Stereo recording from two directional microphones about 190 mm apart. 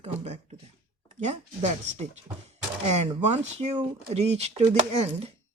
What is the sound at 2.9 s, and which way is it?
Speech, 35° right (ahead or behind).